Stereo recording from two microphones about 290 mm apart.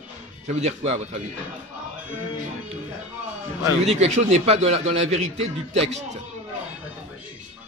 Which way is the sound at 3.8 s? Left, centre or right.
Right.